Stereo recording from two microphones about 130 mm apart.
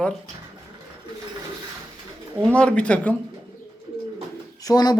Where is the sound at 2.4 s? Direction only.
10° left (ahead or behind).